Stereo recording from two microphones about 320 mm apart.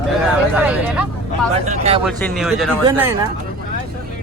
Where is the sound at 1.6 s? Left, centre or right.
Right.